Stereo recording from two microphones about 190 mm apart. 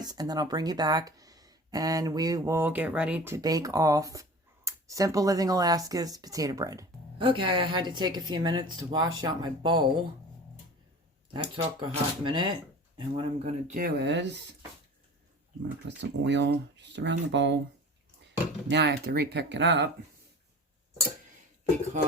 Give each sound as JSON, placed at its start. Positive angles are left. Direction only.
{"t": 0.0, "sound": "speech", "side_deg": -20}
{"t": 11.3, "sound": "speech", "side_deg": -25}
{"t": 13.7, "sound": "speech", "side_deg": -55}
{"t": 16.0, "sound": "speech", "side_deg": -70}
{"t": 18.7, "sound": "speech", "side_deg": -60}